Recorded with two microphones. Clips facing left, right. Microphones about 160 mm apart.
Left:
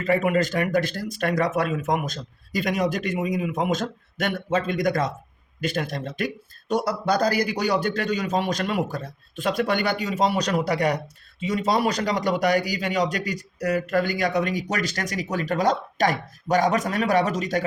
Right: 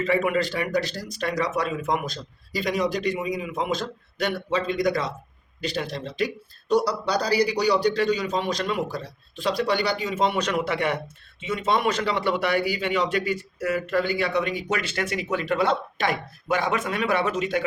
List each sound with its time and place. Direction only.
0.0 s speech: 45° left (ahead or behind)